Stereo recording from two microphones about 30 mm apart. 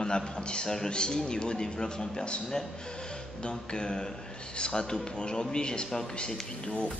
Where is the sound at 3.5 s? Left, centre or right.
Left.